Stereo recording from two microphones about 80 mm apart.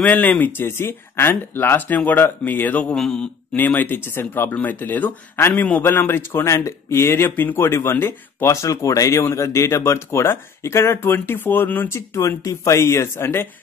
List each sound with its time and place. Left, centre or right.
0.0 s speech: centre
3.0 s mantra: centre
3.5 s speech: left
11.9 s speech: left